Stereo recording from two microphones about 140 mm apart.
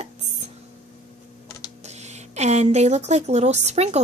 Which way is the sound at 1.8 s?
50° right (ahead or behind).